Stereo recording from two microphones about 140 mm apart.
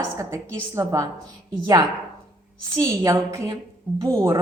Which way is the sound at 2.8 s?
30° right (ahead or behind).